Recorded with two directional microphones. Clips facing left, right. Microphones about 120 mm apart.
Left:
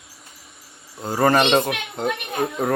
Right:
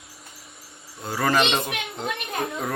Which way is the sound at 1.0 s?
45° left (ahead or behind).